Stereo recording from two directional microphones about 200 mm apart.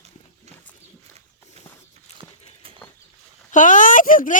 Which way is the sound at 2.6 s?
30° right (ahead or behind).